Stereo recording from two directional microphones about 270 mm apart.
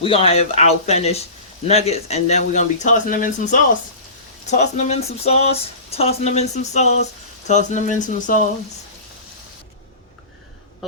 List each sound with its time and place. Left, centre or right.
0.0 s speech: left